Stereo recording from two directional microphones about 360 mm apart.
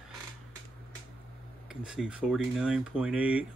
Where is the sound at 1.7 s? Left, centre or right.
Centre.